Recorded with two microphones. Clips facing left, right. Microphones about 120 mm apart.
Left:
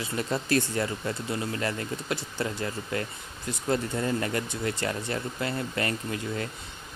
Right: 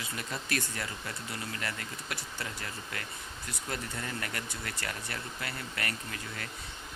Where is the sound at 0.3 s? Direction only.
30° left (ahead or behind).